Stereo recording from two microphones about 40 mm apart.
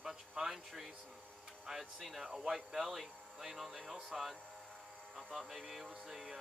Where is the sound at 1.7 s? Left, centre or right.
Centre.